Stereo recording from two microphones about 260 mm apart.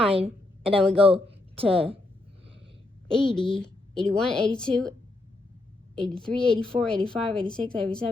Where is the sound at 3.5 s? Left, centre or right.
Centre.